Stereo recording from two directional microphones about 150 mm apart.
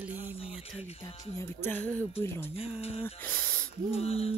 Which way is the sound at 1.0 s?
20° left (ahead or behind).